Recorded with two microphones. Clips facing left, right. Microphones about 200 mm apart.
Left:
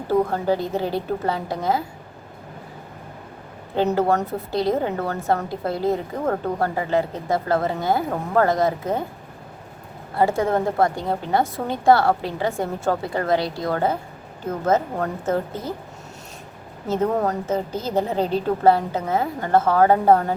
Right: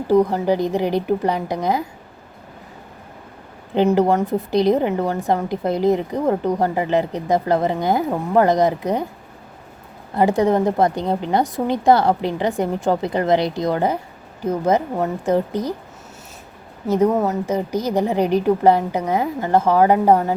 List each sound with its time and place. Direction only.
0.1 s a woman's voice: 15° right (ahead or behind)
3.8 s a woman's voice: 20° right (ahead or behind)
10.2 s a woman's voice: 15° right (ahead or behind)
16.9 s a woman's voice: 10° right (ahead or behind)